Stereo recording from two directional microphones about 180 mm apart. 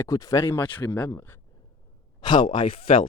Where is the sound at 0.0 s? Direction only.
20° left (ahead or behind).